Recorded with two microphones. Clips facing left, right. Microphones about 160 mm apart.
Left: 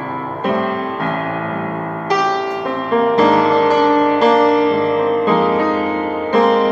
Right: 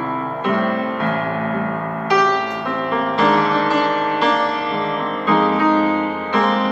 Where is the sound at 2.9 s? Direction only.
40° left (ahead or behind).